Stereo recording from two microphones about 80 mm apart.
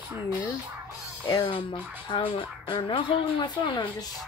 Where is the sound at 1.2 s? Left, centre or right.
Left.